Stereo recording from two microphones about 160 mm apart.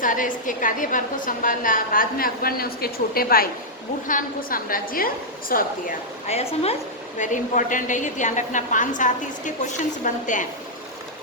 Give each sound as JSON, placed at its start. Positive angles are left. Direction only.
{"t": 0.0, "sound": "a woman's voice", "side_deg": 55}
{"t": 6.2, "sound": "a woman's voice", "side_deg": 40}
{"t": 7.2, "sound": "a woman's voice", "side_deg": 55}